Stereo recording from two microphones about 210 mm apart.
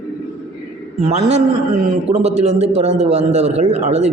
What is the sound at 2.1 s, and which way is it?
A man's voice, 30° right (ahead or behind).